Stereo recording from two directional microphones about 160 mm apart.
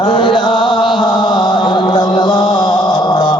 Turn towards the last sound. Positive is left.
turn(degrees=25)  # may be behind; listen again after turning